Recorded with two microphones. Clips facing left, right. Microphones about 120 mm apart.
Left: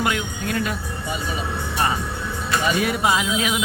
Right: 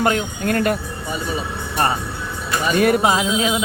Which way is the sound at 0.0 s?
40° right (ahead or behind).